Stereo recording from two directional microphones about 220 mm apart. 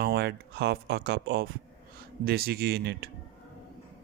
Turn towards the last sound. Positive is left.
turn(degrees=-50)  # may be behind; listen again after turning